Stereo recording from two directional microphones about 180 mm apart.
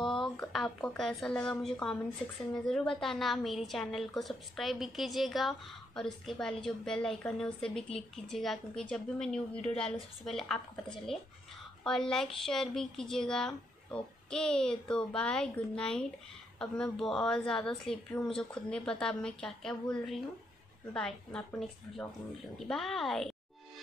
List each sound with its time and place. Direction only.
0.0 s a woman's voice: centre (ahead or behind)